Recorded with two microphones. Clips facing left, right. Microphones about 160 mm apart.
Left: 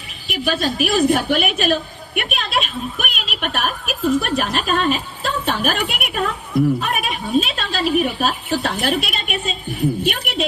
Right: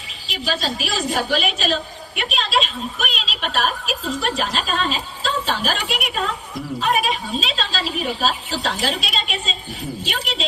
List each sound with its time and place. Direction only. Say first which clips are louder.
0.3 s a woman's voice: left 4 dB; 55° left (ahead or behind)